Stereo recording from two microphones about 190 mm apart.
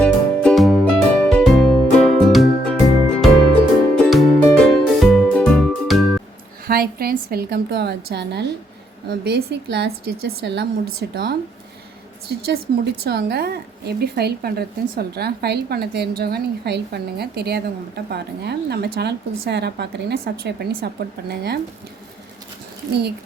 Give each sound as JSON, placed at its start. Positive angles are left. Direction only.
{"t": 0.0, "sound": "music", "side_deg": 5}
{"t": 6.7, "sound": "a woman's voice", "side_deg": -55}
{"t": 22.9, "sound": "a woman's voice", "side_deg": -60}